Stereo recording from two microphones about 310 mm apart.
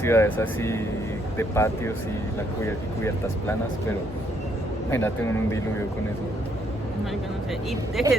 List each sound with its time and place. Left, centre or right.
0.0 s speech: centre
4.9 s speech: centre
8.0 s speech: centre